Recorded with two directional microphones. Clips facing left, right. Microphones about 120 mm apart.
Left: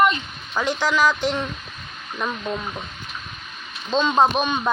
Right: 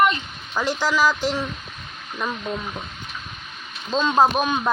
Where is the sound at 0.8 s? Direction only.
10° right (ahead or behind).